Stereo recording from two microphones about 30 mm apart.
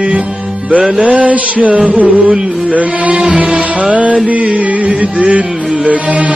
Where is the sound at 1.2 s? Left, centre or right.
Right.